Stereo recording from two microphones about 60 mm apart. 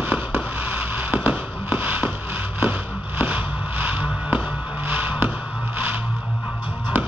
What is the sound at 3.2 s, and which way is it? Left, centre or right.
Fireworks, right.